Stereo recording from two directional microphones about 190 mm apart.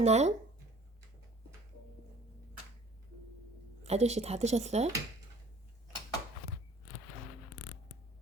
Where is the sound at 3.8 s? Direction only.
35° right (ahead or behind).